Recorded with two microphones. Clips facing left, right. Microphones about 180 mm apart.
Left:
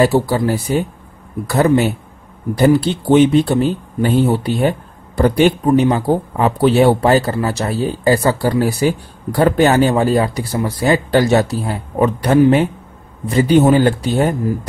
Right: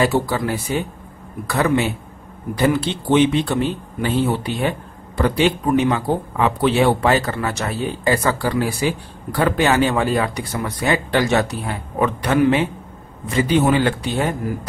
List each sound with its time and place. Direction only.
0.0 s speech: 35° left (ahead or behind)